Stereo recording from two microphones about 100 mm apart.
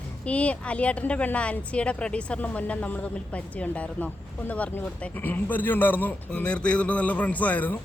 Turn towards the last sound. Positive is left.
turn(degrees=15)  # may be behind; listen again after turning